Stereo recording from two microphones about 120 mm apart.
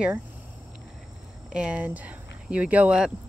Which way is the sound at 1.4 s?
10° right (ahead or behind).